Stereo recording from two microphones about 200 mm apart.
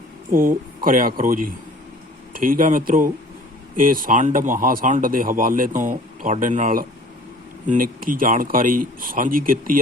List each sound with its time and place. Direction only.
0.3 s speech: 45° right (ahead or behind)